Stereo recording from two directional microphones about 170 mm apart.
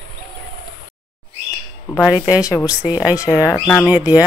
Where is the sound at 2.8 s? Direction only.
10° right (ahead or behind).